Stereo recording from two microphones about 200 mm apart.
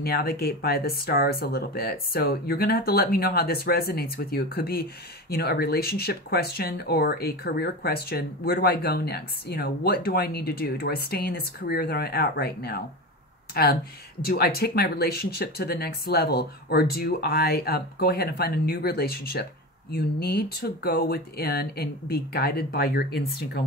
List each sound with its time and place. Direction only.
0.0 s speech: 50° left (ahead or behind)